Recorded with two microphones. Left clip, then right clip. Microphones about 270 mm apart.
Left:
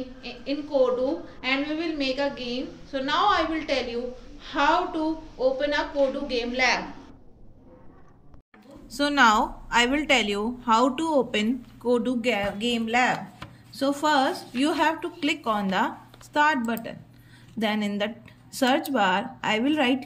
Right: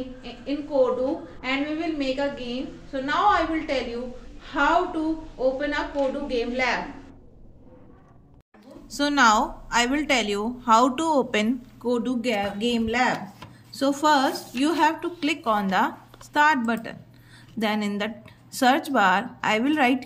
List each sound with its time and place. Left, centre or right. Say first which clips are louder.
0.2 s a sound: left 1 dB; centre
1.4 s a woman's voice: left 1 dB; centre
8.9 s a woman's voice: right 1 dB; centre